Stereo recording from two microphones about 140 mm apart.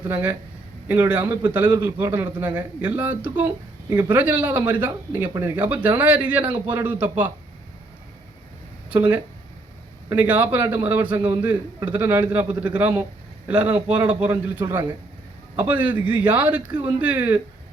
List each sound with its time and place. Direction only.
0.1 s a man's voice: 20° right (ahead or behind)
8.9 s a man's voice: 15° right (ahead or behind)